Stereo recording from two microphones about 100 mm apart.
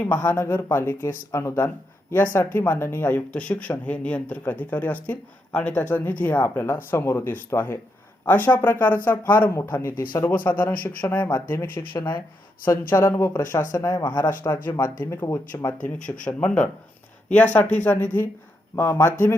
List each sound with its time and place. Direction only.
0.0 s speech: 15° left (ahead or behind)
11.9 s speech: 50° left (ahead or behind)
12.9 s speech: 35° left (ahead or behind)
15.0 s speech: 30° left (ahead or behind)
15.9 s speech: 10° left (ahead or behind)